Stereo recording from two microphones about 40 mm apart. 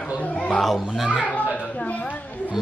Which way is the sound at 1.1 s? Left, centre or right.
Left.